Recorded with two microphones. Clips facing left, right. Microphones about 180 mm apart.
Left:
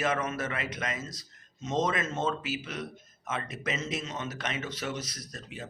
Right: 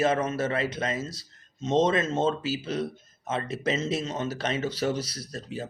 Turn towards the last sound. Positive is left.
turn(degrees=-30)  # may be behind; listen again after turning